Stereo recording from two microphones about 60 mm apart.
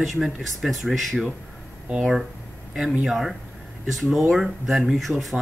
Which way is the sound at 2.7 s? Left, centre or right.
Centre.